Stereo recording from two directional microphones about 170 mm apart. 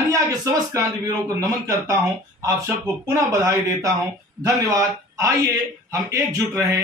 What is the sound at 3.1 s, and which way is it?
Speech, 20° right (ahead or behind).